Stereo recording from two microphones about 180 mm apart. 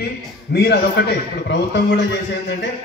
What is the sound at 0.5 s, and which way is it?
A man's voice, 70° left (ahead or behind).